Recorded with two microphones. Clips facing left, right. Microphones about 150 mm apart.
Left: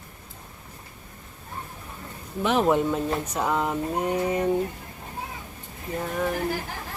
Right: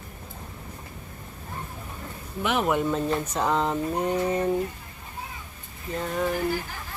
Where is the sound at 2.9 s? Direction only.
10° left (ahead or behind).